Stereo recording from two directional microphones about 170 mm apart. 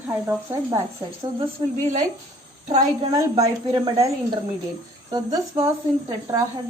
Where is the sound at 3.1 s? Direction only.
25° right (ahead or behind).